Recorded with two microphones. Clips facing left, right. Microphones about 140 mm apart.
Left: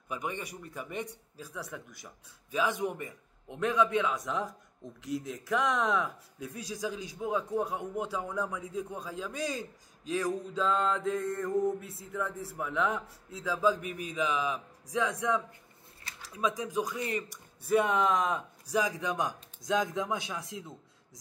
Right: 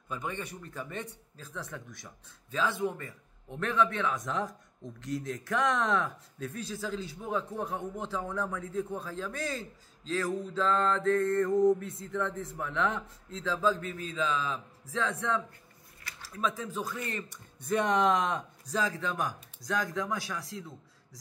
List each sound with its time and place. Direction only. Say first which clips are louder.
0.1 s speech: even; 15° left (ahead or behind)
18.8 s speech: left 1 dB; 15° left (ahead or behind)